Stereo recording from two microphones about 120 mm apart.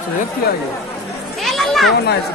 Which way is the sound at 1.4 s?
Centre (ahead or behind).